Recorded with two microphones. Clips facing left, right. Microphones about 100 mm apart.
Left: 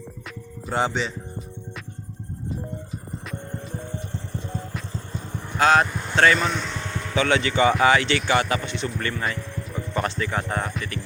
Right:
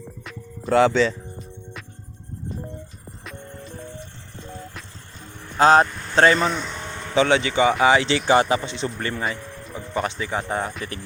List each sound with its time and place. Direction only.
0.7 s speech: 70° right (ahead or behind)
3.2 s music: centre (ahead or behind)
5.5 s speech: 30° right (ahead or behind)
6.5 s speech: 5° right (ahead or behind)
6.9 s speech: 25° right (ahead or behind)